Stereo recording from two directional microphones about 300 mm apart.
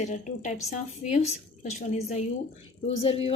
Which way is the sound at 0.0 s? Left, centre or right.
Left.